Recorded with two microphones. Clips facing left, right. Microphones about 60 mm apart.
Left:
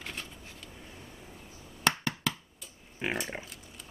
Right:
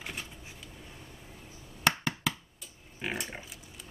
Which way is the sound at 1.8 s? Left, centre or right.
Centre.